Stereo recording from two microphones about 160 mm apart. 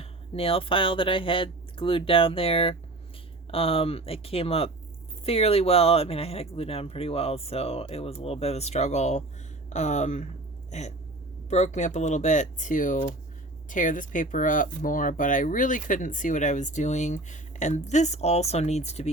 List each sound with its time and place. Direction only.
0.0 s speech: 35° left (ahead or behind)
10.7 s a sound: 45° left (ahead or behind)
11.4 s speech: 45° left (ahead or behind)